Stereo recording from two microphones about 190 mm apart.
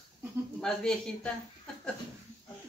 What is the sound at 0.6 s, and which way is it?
Speech, 5° left (ahead or behind).